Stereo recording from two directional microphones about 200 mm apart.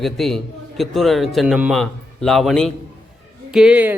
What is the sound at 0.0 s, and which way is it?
A man's voice, centre (ahead or behind).